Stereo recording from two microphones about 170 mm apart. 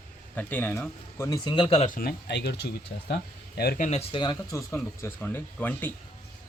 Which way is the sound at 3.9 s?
40° left (ahead or behind).